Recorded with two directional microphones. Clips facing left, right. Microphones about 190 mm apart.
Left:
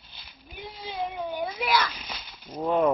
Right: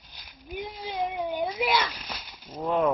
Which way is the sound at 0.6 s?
15° right (ahead or behind).